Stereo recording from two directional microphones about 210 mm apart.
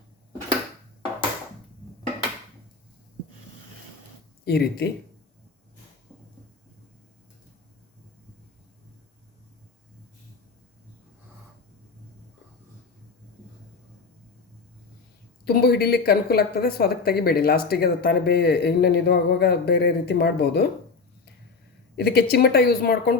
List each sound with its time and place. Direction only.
4.4 s speech: 50° left (ahead or behind)
15.4 s speech: 50° left (ahead or behind)
21.9 s speech: 50° left (ahead or behind)